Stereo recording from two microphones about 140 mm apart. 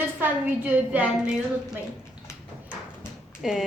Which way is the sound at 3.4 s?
Centre (ahead or behind).